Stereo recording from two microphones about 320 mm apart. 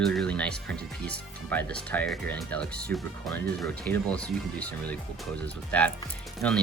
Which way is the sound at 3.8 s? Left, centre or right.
Centre.